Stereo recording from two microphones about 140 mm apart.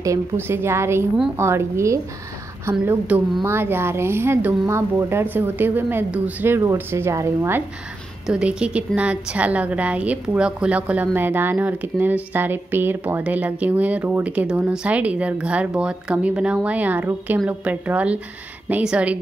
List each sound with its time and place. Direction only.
0.0 s a woman's voice: 20° right (ahead or behind)
8.3 s a woman's voice: 5° right (ahead or behind)